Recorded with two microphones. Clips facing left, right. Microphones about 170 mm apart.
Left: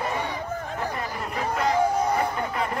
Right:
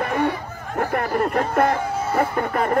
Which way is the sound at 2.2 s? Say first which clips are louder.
Right 5 dB; 50° right (ahead or behind).